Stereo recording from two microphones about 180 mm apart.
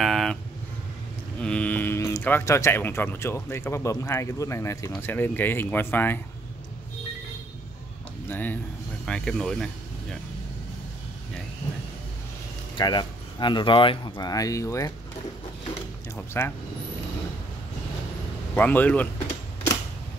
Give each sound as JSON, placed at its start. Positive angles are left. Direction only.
{"t": 0.0, "sound": "a sound", "side_deg": 0}
{"t": 1.4, "sound": "speech", "side_deg": 5}
{"t": 8.3, "sound": "speech", "side_deg": 10}
{"t": 12.7, "sound": "speech", "side_deg": 25}
{"t": 16.3, "sound": "speech", "side_deg": 15}
{"t": 18.5, "sound": "speech", "side_deg": 10}